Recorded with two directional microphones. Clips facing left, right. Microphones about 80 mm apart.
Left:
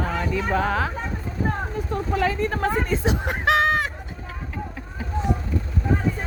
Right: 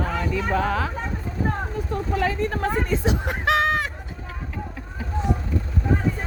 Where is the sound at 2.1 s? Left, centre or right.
Left.